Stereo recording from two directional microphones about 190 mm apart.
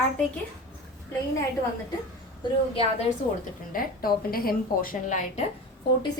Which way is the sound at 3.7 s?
50° left (ahead or behind).